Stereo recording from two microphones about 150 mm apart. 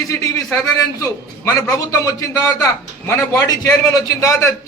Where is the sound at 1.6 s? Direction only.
25° left (ahead or behind).